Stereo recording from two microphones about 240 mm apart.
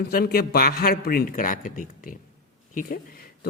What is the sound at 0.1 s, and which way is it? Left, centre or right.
A man's voice, left.